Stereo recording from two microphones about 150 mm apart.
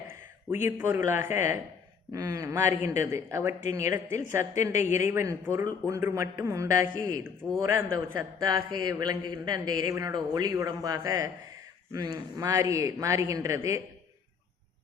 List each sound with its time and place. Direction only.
0.1 s a woman's voice: 15° right (ahead or behind)